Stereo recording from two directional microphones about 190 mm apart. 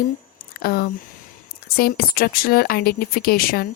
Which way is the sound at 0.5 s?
50° left (ahead or behind).